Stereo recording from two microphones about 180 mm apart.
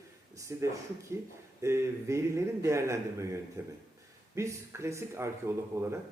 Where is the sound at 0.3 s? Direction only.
15° right (ahead or behind).